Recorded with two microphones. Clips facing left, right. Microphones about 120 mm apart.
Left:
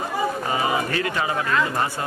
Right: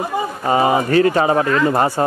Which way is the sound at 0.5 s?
35° right (ahead or behind).